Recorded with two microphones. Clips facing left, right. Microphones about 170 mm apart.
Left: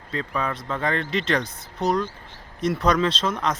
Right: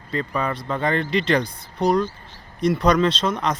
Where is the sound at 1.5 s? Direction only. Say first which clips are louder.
Right 1 dB; 25° left (ahead or behind).